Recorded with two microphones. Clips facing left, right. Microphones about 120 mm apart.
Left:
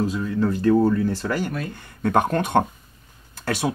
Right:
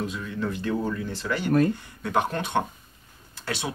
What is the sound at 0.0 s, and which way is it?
Speech, 35° left (ahead or behind).